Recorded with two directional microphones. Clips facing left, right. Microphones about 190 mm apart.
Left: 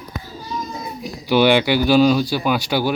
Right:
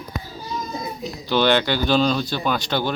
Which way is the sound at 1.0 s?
10° left (ahead or behind).